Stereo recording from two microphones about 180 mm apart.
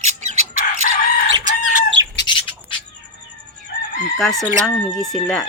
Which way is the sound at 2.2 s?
25° left (ahead or behind).